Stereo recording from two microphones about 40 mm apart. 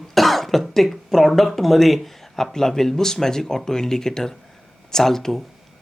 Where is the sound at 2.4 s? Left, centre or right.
Centre.